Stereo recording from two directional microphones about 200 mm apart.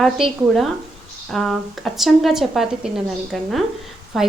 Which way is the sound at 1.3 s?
Centre (ahead or behind).